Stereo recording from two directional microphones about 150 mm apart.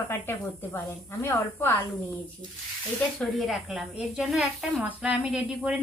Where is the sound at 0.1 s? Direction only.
15° left (ahead or behind).